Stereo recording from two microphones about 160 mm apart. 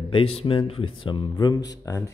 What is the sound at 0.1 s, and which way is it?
Speech, 35° left (ahead or behind).